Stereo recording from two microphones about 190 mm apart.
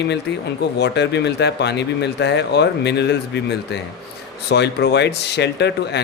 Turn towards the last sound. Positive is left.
turn(degrees=65)  # may be behind; listen again after turning